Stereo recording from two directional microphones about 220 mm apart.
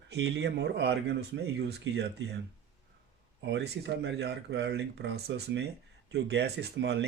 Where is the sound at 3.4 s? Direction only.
55° right (ahead or behind).